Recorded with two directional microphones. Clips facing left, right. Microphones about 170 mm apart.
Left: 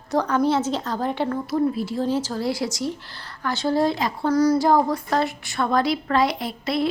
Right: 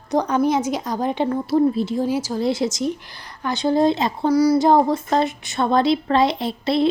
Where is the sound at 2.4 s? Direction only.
20° right (ahead or behind).